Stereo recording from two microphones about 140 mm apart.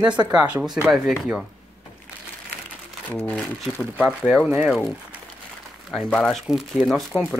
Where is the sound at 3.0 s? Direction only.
10° left (ahead or behind).